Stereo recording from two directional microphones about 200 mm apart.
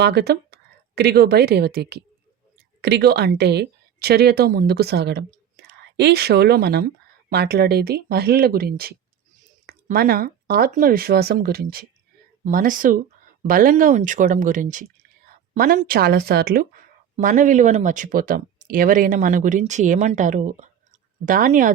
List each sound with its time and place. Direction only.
0.0 s a woman's voice: 55° right (ahead or behind)